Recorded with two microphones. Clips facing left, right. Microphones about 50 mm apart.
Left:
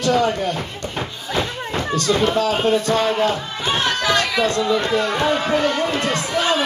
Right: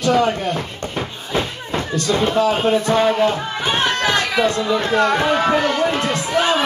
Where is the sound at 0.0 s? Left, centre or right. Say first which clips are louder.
Right 1 dB; right.